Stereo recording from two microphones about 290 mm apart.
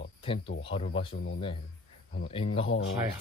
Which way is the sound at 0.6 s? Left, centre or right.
Centre.